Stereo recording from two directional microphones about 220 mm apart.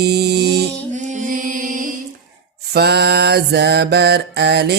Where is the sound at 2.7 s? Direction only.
50° right (ahead or behind).